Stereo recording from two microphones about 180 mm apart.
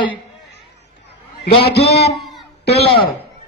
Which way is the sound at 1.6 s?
65° left (ahead or behind).